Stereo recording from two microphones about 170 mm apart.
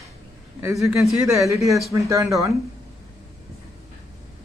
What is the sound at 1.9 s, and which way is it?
Speech, 20° right (ahead or behind).